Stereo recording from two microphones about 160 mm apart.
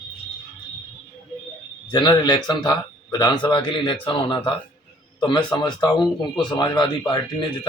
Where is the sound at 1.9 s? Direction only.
25° left (ahead or behind).